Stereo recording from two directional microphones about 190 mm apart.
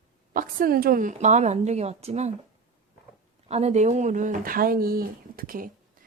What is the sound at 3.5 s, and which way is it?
Speech, 35° right (ahead or behind).